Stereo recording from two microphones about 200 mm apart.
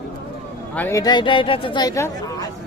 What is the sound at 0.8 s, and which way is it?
Speech, 15° left (ahead or behind).